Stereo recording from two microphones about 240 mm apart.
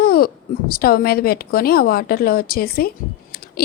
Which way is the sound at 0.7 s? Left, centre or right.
Left.